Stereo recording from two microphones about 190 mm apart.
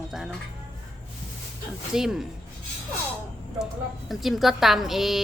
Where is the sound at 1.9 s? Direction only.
5° right (ahead or behind).